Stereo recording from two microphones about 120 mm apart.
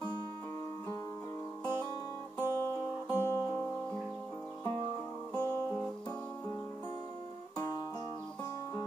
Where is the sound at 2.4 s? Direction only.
25° right (ahead or behind).